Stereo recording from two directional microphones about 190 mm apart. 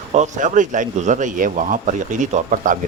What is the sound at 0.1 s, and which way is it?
Speech, 40° right (ahead or behind).